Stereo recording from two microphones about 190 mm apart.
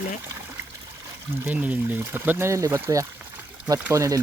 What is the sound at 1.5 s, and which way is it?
Speech, 10° right (ahead or behind).